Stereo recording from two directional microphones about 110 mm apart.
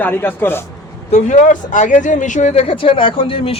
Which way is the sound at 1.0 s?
90° left.